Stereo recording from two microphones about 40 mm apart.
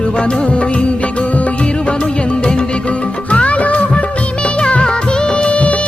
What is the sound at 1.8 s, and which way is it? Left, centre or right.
Music, left.